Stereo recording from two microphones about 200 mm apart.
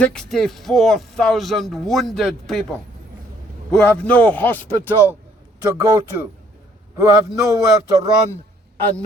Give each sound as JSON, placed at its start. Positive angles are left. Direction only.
{"t": 0.0, "sound": "a man's voice", "side_deg": 5}
{"t": 3.7, "sound": "a man's voice", "side_deg": 5}
{"t": 5.6, "sound": "a man's voice", "side_deg": -20}